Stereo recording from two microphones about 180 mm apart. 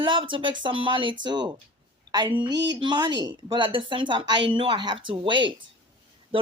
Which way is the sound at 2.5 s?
75° right (ahead or behind).